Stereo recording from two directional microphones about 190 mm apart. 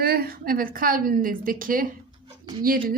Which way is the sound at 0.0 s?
55° right (ahead or behind).